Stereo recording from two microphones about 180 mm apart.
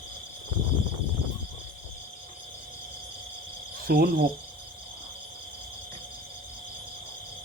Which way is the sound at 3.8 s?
60° right (ahead or behind).